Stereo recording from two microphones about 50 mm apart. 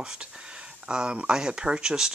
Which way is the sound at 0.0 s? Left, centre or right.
Centre.